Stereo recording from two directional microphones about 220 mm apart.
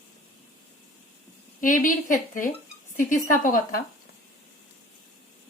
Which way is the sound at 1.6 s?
35° left (ahead or behind).